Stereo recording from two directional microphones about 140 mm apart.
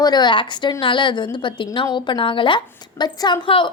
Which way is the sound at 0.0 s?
30° left (ahead or behind).